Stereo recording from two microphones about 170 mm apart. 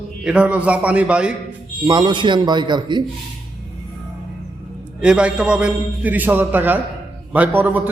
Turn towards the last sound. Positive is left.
turn(degrees=-10)  # may be behind; listen again after turning